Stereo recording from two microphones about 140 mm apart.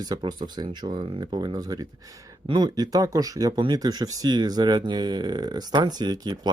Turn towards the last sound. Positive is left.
turn(degrees=-30)  # may be behind; listen again after turning